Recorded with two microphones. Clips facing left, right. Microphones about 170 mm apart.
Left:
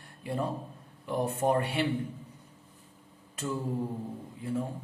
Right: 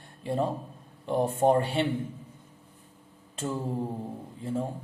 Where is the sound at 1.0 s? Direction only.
25° right (ahead or behind).